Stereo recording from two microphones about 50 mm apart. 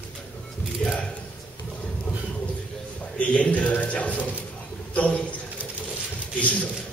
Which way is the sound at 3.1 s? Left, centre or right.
Left.